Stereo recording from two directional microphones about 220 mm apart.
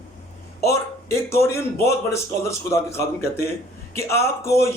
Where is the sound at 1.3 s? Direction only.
10° left (ahead or behind).